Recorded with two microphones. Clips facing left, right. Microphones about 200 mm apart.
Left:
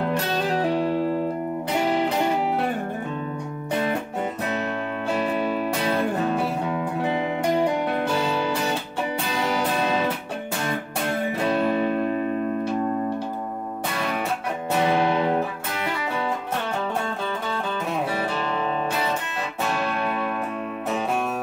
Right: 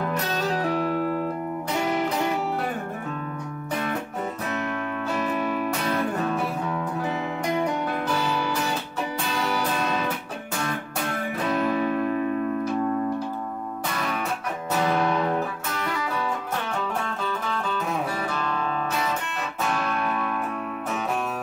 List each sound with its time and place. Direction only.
0.1 s music: 30° left (ahead or behind)
5.1 s music: 30° left (ahead or behind)
9.8 s music: 30° left (ahead or behind)
11.1 s music: 30° left (ahead or behind)
14.8 s music: 25° left (ahead or behind)
18.3 s music: 30° left (ahead or behind)
19.8 s music: 30° left (ahead or behind)